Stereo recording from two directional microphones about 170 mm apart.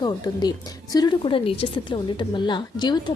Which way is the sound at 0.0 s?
25° left (ahead or behind).